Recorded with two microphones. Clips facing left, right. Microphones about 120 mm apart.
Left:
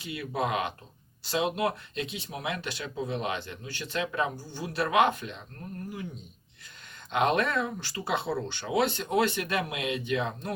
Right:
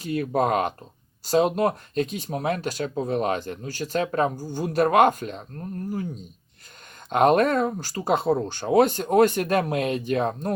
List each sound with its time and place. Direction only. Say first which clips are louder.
0.0 s speech: right 8 dB; 45° right (ahead or behind)
7.1 s speech: right 7 dB; 45° right (ahead or behind)